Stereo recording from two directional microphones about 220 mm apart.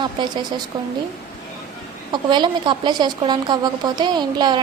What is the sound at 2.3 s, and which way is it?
A woman's voice, 20° right (ahead or behind).